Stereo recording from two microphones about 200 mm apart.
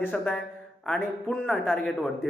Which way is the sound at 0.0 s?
5° left (ahead or behind).